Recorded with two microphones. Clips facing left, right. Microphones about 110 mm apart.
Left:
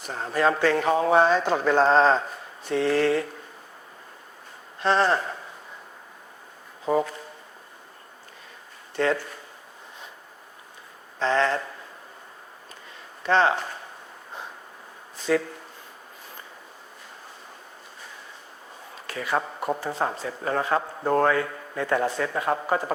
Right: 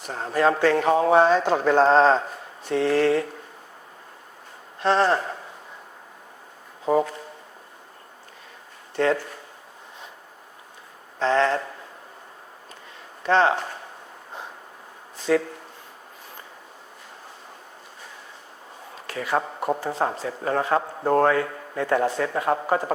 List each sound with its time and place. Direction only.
0.1 s speech: 40° right (ahead or behind)
4.8 s speech: 50° right (ahead or behind)
6.8 s speech: 40° right (ahead or behind)
9.0 s speech: 45° right (ahead or behind)
11.2 s speech: 45° right (ahead or behind)
13.2 s speech: 50° right (ahead or behind)
15.2 s speech: 45° right (ahead or behind)
18.9 s speech: 50° right (ahead or behind)